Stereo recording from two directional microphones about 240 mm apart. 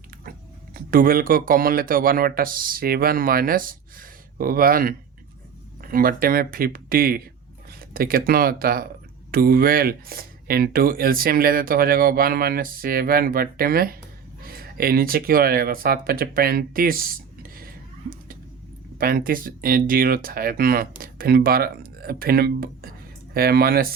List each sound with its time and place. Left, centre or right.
0.3 s speech: right
18.9 s speech: right